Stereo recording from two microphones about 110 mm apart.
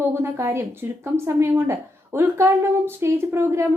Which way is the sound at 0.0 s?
20° right (ahead or behind).